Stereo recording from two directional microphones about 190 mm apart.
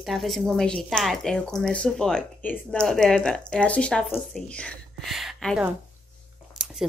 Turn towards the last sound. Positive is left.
turn(degrees=0)  # may be behind; listen again after turning